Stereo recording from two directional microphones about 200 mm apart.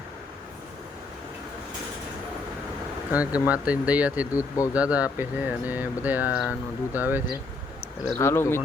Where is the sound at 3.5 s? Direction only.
5° right (ahead or behind).